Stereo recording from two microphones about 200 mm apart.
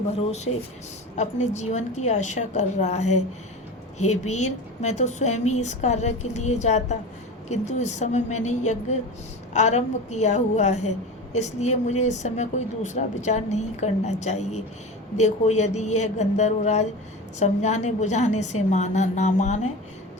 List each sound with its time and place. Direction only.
0.2 s a woman's voice: 35° left (ahead or behind)